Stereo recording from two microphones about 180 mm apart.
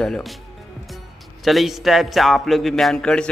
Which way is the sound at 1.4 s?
Centre (ahead or behind).